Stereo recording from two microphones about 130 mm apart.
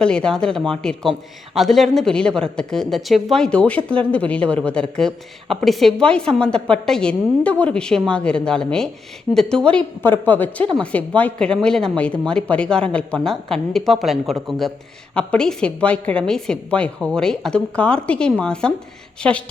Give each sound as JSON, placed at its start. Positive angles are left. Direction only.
{"t": 0.0, "sound": "a woman's voice", "side_deg": 5}